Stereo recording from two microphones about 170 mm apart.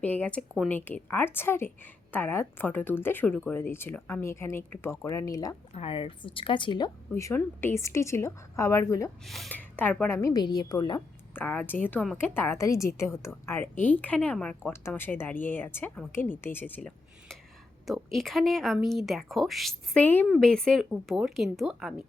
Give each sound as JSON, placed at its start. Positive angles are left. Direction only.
{"t": 0.0, "sound": "speech", "side_deg": 10}
{"t": 5.7, "sound": "speech", "side_deg": 35}
{"t": 7.1, "sound": "speech", "side_deg": 15}
{"t": 9.2, "sound": "speech", "side_deg": 0}
{"t": 10.2, "sound": "a woman's voice", "side_deg": 20}
{"t": 11.3, "sound": "speech", "side_deg": 10}